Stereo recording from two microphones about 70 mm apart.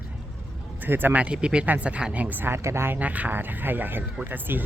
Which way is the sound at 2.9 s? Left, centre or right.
Right.